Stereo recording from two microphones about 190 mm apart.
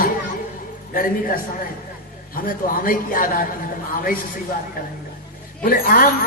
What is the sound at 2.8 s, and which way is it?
Speech, 45° left (ahead or behind).